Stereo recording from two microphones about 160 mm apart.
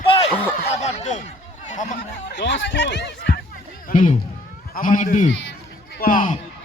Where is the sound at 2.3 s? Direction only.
90° left.